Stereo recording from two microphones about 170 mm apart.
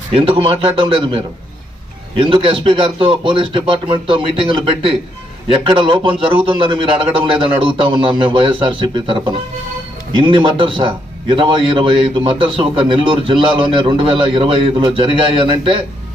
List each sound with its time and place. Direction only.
0.1 s a man's voice: 35° right (ahead or behind)